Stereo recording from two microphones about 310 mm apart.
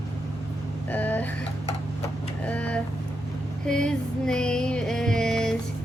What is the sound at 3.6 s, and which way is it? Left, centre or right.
Music, centre.